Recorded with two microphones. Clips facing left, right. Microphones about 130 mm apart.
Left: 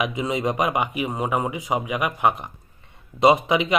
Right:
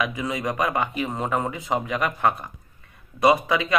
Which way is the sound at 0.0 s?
20° left (ahead or behind).